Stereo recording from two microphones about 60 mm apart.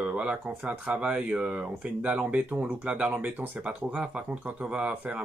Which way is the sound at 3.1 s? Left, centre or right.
Right.